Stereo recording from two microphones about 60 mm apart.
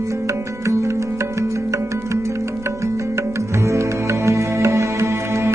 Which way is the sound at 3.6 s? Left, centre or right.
Right.